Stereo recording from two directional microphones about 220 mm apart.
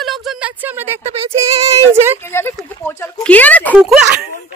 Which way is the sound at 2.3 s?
10° left (ahead or behind).